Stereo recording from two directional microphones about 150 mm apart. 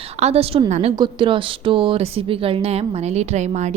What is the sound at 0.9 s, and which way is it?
Speech, 30° right (ahead or behind).